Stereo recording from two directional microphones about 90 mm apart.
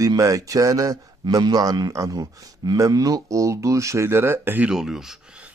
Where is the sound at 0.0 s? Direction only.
40° right (ahead or behind).